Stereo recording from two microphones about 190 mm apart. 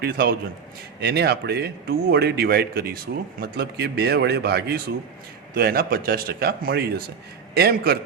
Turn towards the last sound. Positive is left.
turn(degrees=-55)  # may be behind; listen again after turning